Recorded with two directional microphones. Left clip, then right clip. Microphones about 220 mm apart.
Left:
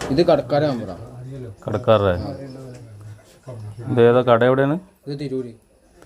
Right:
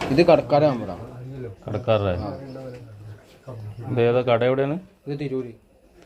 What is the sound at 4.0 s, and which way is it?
Speech, 50° left (ahead or behind).